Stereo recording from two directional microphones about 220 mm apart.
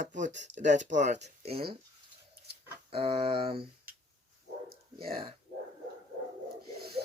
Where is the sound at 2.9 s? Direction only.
25° right (ahead or behind).